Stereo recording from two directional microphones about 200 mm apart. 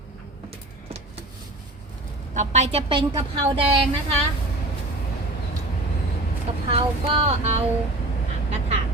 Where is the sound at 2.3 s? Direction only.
35° right (ahead or behind).